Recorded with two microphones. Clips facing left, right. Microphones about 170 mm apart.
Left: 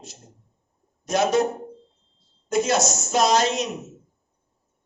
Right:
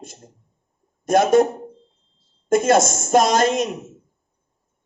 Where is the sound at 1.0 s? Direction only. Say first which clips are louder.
Right 6 dB; 50° right (ahead or behind).